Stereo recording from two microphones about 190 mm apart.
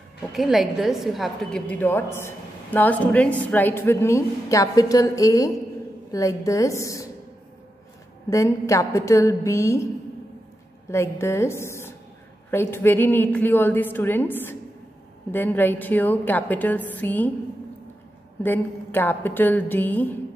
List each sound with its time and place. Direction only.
0.3 s a woman's voice: centre (ahead or behind); by 7.1 s 15° left (ahead or behind)
8.3 s a woman's voice: 15° left (ahead or behind)
10.9 s a woman's voice: 15° left (ahead or behind)
18.4 s a woman's voice: 10° left (ahead or behind)